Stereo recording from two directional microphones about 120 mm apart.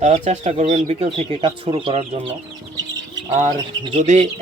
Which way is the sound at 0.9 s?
65° right (ahead or behind).